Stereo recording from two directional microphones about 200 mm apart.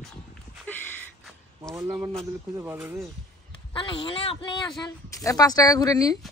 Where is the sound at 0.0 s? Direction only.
5° left (ahead or behind).